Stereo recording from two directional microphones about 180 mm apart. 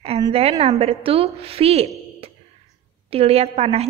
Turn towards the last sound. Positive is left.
turn(degrees=-35)  # may be behind; listen again after turning